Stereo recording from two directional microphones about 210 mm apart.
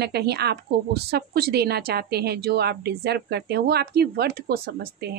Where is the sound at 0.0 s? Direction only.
50° right (ahead or behind).